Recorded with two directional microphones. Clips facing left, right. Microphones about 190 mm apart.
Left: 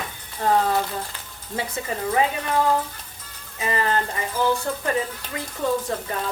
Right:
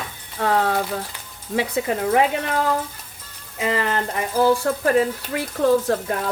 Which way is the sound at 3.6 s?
90° right.